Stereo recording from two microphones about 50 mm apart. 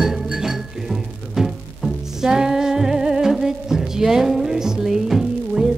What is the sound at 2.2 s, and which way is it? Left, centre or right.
Music, centre.